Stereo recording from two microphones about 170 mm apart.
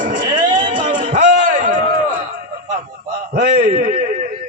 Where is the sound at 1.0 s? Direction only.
50° right (ahead or behind).